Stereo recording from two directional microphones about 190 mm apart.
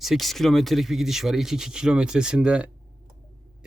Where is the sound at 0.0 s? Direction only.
Centre (ahead or behind).